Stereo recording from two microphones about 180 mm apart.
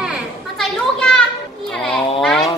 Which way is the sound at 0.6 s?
5° left (ahead or behind).